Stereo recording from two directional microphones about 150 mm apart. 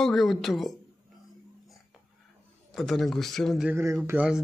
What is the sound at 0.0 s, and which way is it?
Speech, centre (ahead or behind).